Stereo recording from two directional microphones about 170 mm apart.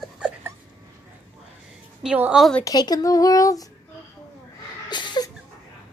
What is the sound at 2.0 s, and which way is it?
Speech, 5° right (ahead or behind).